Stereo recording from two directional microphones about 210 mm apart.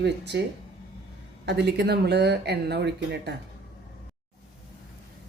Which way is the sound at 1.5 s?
50° right (ahead or behind).